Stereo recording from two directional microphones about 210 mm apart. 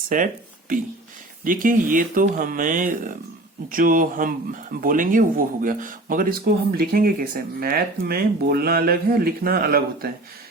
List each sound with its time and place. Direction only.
0.1 s speech: 40° right (ahead or behind)
1.5 s speech: 40° right (ahead or behind)